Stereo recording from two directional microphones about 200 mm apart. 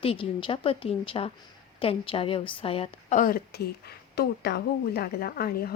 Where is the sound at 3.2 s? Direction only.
45° left (ahead or behind).